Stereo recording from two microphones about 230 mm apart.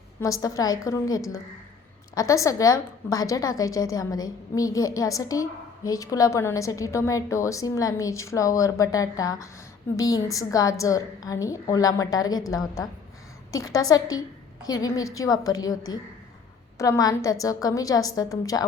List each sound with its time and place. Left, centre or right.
0.2 s a woman's voice: centre